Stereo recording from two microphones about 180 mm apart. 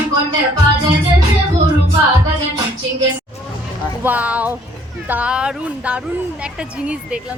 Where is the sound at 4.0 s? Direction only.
10° right (ahead or behind).